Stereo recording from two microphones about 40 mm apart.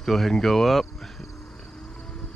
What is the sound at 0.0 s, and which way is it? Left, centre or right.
Speech, centre.